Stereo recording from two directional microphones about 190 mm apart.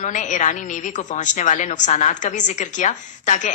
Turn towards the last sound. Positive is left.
turn(degrees=40)  # may be behind; listen again after turning